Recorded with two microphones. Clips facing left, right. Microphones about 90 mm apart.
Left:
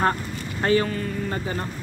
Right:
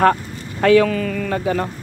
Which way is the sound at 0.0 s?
75° right (ahead or behind).